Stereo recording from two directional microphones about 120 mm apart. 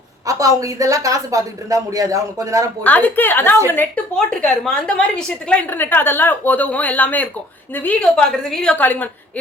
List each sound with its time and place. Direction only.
0.3 s a woman's voice: 30° right (ahead or behind)
2.8 s a woman's voice: 15° left (ahead or behind)
4.1 s a woman's voice: 5° left (ahead or behind)